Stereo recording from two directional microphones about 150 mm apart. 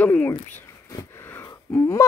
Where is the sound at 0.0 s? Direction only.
10° left (ahead or behind).